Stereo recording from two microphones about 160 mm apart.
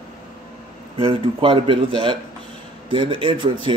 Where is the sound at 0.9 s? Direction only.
35° right (ahead or behind).